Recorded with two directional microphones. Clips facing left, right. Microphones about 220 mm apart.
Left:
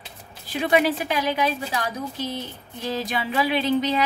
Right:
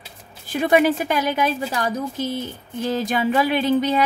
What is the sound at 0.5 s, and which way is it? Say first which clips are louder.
A woman's voice: right 4 dB; 45° right (ahead or behind).